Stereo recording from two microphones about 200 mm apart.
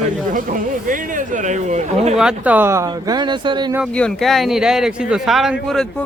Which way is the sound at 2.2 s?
5° right (ahead or behind).